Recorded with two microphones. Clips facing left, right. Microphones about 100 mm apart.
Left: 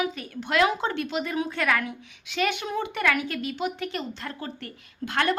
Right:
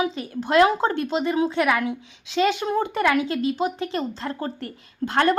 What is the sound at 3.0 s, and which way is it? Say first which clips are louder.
A woman's voice: right 5 dB; 25° right (ahead or behind).